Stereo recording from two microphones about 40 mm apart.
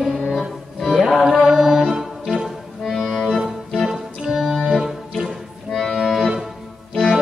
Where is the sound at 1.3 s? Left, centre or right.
Centre.